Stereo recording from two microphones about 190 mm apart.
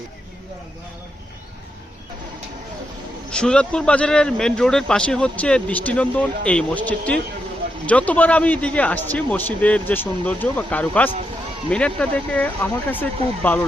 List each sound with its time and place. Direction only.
3.2 s a man's voice: 5° left (ahead or behind)